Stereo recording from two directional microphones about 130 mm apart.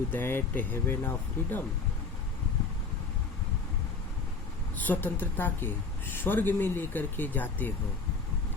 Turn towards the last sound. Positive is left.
turn(degrees=15)  # may be behind; listen again after turning